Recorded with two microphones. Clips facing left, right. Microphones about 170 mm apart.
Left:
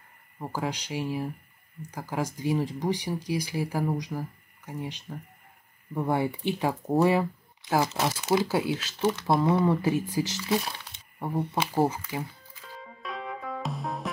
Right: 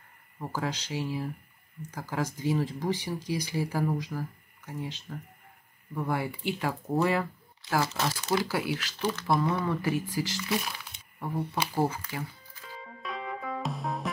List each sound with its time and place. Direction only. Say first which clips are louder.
0.4 s speech: left 1 dB; 10° left (ahead or behind)
5.9 s speech: left 4 dB; 25° left (ahead or behind)
12.6 s music: even; centre (ahead or behind)